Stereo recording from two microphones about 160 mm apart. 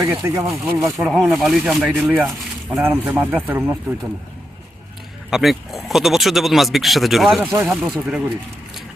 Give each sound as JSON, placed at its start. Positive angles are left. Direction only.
{"t": 0.0, "sound": "speech", "side_deg": -15}
{"t": 5.3, "sound": "speech", "side_deg": 0}